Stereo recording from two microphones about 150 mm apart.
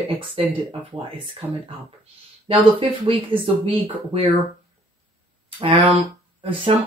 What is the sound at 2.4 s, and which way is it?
Speech, 35° right (ahead or behind).